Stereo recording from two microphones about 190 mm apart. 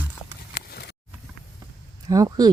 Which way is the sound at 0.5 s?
60° left (ahead or behind).